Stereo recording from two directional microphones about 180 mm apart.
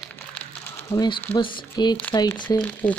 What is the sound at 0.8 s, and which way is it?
Speech, 20° left (ahead or behind).